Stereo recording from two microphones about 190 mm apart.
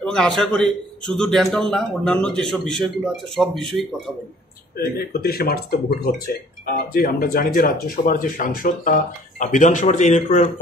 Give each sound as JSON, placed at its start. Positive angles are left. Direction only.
{"t": 0.0, "sound": "a sound", "side_deg": 5}
{"t": 0.4, "sound": "a man's voice", "side_deg": 5}
{"t": 4.7, "sound": "speech", "side_deg": 55}